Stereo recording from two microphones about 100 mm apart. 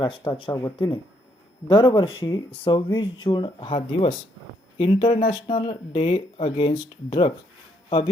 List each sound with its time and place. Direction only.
0.0 s speech: 55° left (ahead or behind)
1.6 s speech: 50° left (ahead or behind)